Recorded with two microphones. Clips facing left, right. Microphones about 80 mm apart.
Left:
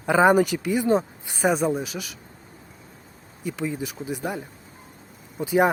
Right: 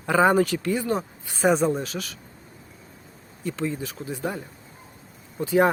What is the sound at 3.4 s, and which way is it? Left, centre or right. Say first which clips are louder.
Speech: even; centre.